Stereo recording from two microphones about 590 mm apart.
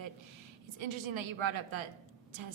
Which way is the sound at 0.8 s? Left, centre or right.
Right.